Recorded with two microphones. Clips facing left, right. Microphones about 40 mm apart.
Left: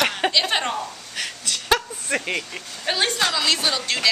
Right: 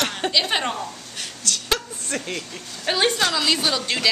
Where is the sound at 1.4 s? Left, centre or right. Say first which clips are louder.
Left 3 dB; left.